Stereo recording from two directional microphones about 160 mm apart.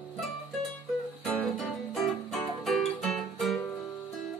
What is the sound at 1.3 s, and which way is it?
Music, centre (ahead or behind).